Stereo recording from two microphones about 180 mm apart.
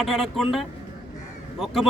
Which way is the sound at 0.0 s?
Centre (ahead or behind).